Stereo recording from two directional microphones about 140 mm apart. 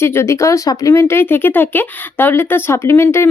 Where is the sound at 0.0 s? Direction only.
20° left (ahead or behind).